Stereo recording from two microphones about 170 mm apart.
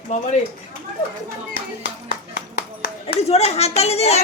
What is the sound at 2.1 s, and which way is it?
Clapping, 60° left (ahead or behind).